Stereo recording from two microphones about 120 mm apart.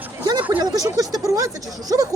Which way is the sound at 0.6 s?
30° right (ahead or behind).